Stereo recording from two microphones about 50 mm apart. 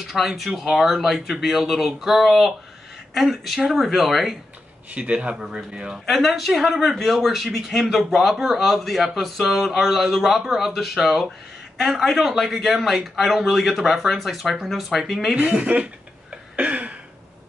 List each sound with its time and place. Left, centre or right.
0.0 s speech: centre
4.9 s speech: right
6.0 s speech: centre
15.5 s speech: right
16.5 s a sound: right